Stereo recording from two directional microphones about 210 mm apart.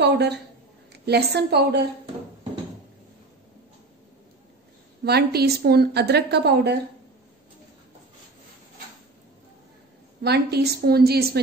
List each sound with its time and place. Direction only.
0.0 s a woman's voice: 50° right (ahead or behind)
5.0 s a woman's voice: 50° right (ahead or behind)
10.2 s a woman's voice: 50° right (ahead or behind)